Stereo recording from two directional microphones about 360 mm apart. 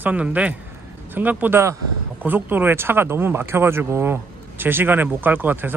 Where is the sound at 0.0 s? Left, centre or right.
Centre.